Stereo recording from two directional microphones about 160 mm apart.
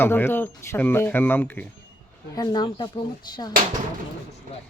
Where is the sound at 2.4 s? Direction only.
25° left (ahead or behind).